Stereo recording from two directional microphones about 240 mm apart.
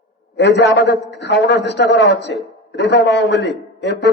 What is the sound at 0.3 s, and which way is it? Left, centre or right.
A man's voice, left.